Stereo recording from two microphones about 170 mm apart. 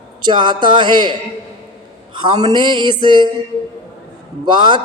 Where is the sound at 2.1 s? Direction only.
25° right (ahead or behind).